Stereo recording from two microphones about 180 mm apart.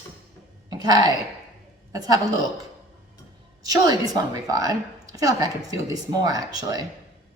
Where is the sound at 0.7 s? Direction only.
20° right (ahead or behind).